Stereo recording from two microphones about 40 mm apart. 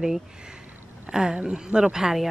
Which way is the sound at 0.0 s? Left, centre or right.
Centre.